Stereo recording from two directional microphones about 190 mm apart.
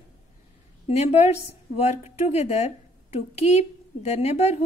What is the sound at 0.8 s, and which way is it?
A woman's voice, 35° left (ahead or behind).